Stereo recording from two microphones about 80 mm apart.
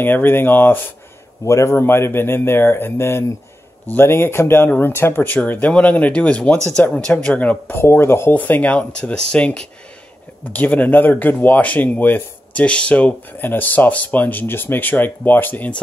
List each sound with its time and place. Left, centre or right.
0.0 s speech: left
1.4 s speech: left